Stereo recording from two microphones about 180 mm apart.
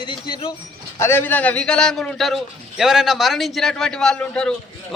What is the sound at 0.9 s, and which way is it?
A man's voice, 15° left (ahead or behind).